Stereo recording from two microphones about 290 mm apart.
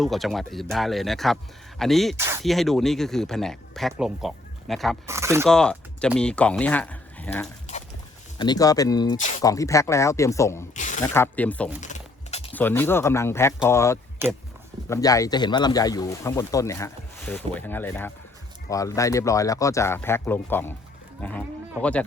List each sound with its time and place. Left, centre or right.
0.0 s speech: centre
5.5 s speech: centre
10.8 s a sound: left
11.0 s speech: centre
11.8 s a sound: left
12.5 s speech: centre